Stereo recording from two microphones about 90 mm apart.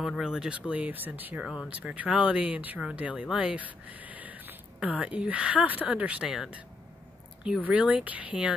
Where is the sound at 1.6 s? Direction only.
15° right (ahead or behind).